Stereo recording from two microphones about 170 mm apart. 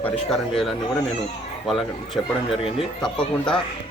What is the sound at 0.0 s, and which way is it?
Speech, centre (ahead or behind).